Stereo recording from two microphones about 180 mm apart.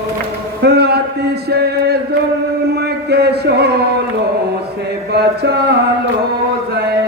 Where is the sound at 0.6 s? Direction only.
65° right (ahead or behind).